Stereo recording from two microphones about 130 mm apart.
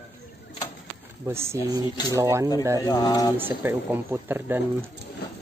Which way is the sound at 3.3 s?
15° right (ahead or behind).